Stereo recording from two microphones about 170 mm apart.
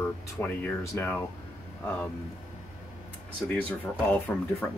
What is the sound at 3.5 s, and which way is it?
Speech, 10° left (ahead or behind).